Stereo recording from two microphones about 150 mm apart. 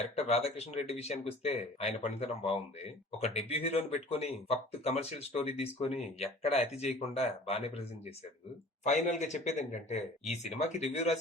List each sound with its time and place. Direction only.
0.2 s speech: 40° left (ahead or behind)
8.8 s speech: 55° left (ahead or behind)